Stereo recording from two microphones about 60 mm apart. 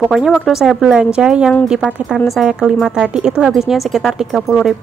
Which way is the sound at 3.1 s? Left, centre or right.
Centre.